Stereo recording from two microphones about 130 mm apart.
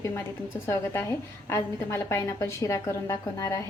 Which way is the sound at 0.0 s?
20° left (ahead or behind).